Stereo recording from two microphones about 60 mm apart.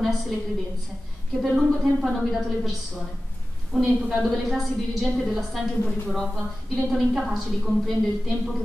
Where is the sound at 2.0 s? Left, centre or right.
Centre.